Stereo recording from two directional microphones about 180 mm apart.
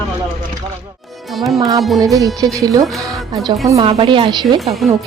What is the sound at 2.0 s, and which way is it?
Speech, 20° right (ahead or behind).